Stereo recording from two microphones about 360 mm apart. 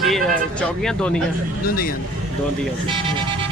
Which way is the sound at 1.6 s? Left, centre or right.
Left.